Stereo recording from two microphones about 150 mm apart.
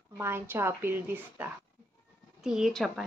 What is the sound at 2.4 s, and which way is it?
Speech, centre (ahead or behind).